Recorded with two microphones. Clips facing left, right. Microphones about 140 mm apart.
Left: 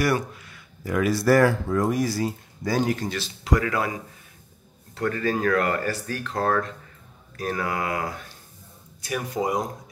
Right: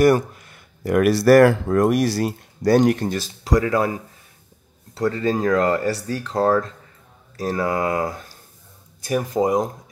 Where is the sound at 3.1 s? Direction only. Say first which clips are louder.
Right 3 dB; 40° right (ahead or behind).